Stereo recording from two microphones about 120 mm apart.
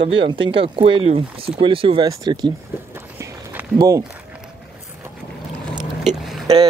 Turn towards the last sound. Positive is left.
turn(degrees=-50)  # may be behind; listen again after turning